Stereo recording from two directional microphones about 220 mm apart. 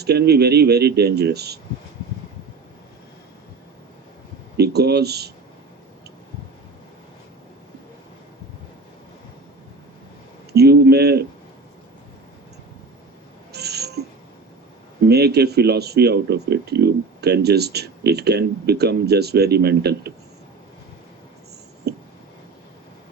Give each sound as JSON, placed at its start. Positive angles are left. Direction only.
{"t": 0.0, "sound": "speech", "side_deg": -45}
{"t": 4.5, "sound": "speech", "side_deg": -50}
{"t": 10.5, "sound": "speech", "side_deg": -45}
{"t": 13.5, "sound": "a sound", "side_deg": -50}
{"t": 15.0, "sound": "speech", "side_deg": -45}
{"t": 21.9, "sound": "a sound", "side_deg": -50}